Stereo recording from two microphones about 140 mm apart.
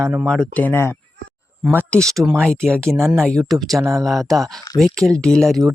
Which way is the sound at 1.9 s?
10° left (ahead or behind).